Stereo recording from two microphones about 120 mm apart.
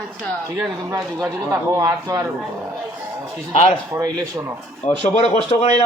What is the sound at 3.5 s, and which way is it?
Speech, 70° left (ahead or behind).